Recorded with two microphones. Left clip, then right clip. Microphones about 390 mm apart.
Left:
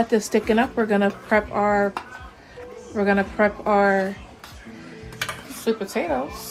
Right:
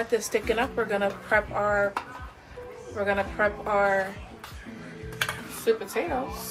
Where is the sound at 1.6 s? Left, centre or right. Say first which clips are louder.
Left 4 dB; left.